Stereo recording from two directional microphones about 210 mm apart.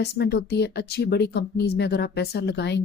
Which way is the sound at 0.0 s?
50° left (ahead or behind).